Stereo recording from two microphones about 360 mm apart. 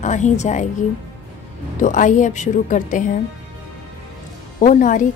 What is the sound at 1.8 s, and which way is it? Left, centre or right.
A woman's voice, left.